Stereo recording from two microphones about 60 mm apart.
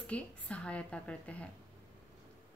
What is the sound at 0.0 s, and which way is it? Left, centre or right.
A woman's voice, left.